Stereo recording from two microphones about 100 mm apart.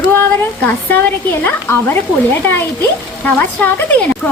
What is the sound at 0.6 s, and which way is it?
Speech, 20° left (ahead or behind).